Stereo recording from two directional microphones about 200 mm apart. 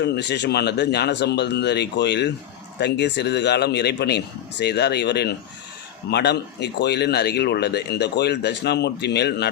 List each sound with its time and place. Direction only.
0.0 s speech: 60° left (ahead or behind)